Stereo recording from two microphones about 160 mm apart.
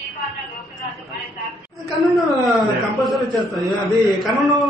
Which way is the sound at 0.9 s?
Centre (ahead or behind).